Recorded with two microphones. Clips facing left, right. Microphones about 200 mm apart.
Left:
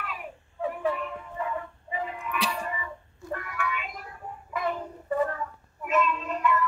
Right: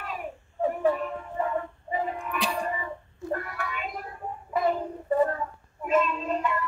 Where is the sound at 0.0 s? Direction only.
40° right (ahead or behind).